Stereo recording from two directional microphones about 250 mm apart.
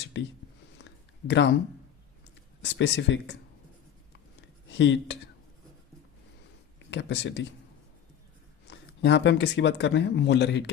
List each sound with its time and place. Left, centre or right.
0.1 s speech: left
2.6 s speech: left
4.4 s a sound: left
6.9 s speech: left
8.6 s speech: left